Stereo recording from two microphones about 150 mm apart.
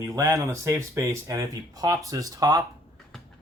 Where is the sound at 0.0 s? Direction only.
20° right (ahead or behind).